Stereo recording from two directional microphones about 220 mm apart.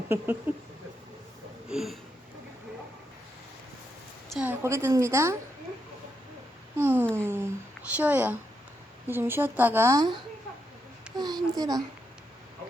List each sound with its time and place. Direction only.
0.5 s a woman's voice: 5° right (ahead or behind)
1.6 s a sound: centre (ahead or behind)
4.3 s a woman's voice: 5° right (ahead or behind)
6.7 s a woman's voice: 10° right (ahead or behind)
11.2 s a woman's voice: 20° right (ahead or behind)